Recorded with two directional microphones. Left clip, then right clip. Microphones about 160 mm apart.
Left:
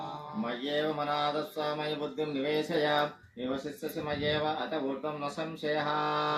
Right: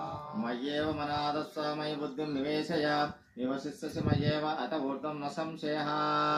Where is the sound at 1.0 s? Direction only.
90° right.